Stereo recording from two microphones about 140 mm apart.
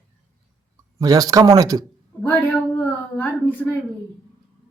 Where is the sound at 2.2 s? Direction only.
15° left (ahead or behind).